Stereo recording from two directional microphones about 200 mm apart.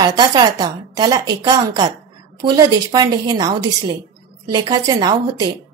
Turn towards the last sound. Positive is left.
turn(degrees=-20)  # may be behind; listen again after turning